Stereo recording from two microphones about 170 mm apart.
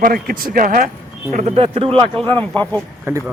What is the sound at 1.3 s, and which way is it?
Speech, 40° right (ahead or behind).